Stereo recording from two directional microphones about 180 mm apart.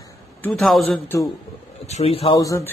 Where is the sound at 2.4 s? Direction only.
20° left (ahead or behind).